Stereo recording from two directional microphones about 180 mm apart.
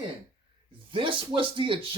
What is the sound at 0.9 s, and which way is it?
Speech, 30° right (ahead or behind).